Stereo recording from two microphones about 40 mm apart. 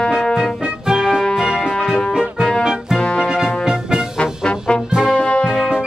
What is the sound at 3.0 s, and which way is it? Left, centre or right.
Music, left.